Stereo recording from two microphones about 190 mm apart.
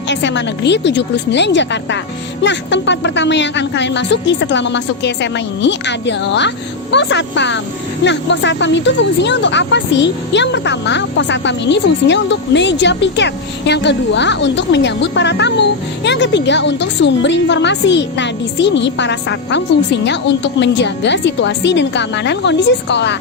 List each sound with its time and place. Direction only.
0.1 s speech: 70° left (ahead or behind)